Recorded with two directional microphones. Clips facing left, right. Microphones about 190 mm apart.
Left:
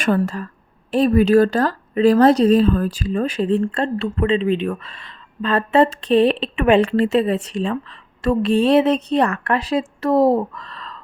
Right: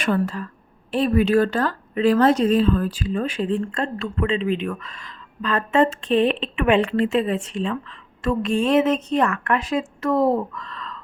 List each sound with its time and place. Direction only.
0.0 s a woman's voice: 45° left (ahead or behind)